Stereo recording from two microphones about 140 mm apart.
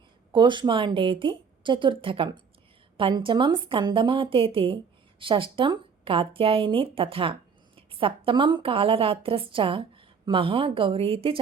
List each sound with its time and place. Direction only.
0.3 s a woman's voice: 35° right (ahead or behind)